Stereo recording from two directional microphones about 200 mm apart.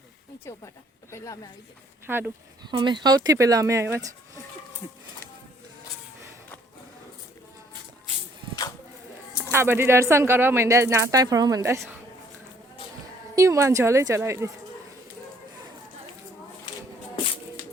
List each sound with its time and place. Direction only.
1.1 s speech: 15° left (ahead or behind)
2.0 s speech: 10° right (ahead or behind)
2.6 s speech: 25° right (ahead or behind)
9.3 s speech: 10° right (ahead or behind)
13.3 s speech: 15° right (ahead or behind)